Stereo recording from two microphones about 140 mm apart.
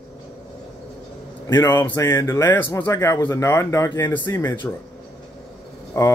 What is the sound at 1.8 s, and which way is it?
Speech, 20° left (ahead or behind).